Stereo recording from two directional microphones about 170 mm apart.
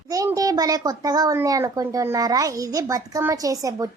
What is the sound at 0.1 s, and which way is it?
A child's voice, 20° right (ahead or behind).